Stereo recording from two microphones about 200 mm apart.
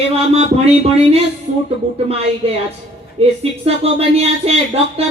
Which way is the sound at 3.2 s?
30° right (ahead or behind).